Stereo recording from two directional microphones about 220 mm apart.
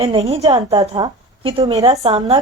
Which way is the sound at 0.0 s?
25° right (ahead or behind).